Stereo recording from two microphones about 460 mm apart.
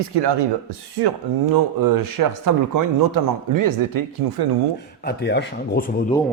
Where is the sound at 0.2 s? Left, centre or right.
Right.